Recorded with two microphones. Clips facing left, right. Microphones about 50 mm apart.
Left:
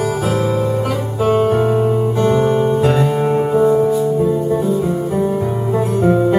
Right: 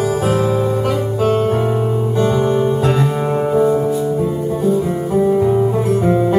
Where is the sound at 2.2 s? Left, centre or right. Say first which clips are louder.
Even; left.